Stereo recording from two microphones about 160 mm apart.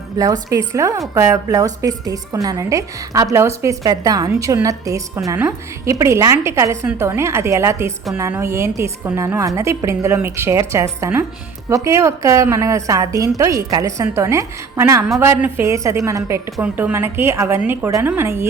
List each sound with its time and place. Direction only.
0.2 s a woman's voice: 20° right (ahead or behind)